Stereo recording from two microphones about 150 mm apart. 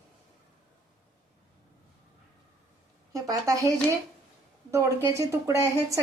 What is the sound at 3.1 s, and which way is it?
Speech, 25° right (ahead or behind).